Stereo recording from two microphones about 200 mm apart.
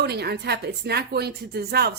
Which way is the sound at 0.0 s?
55° right (ahead or behind).